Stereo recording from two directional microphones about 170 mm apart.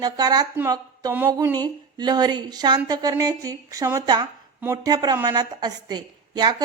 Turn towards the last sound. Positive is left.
turn(degrees=-25)  # may be behind; listen again after turning